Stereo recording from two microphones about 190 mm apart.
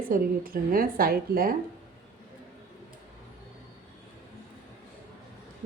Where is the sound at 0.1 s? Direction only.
50° right (ahead or behind).